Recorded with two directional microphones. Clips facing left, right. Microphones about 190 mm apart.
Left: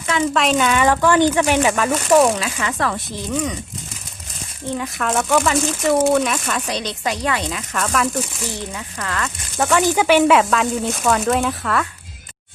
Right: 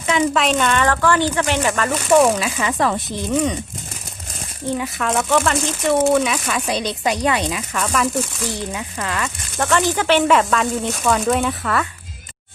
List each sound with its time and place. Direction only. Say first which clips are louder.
0.3 s speech: left 1 dB; centre (ahead or behind)
1.9 s speech: right 2 dB; centre (ahead or behind)
2.4 s speech: right 3 dB; 15° right (ahead or behind)
4.8 s speech: left 2 dB; centre (ahead or behind)
7.7 s speech: left 1 dB; centre (ahead or behind)
9.0 s speech: even; 15° right (ahead or behind)
9.6 s speech: left 2 dB; 10° left (ahead or behind)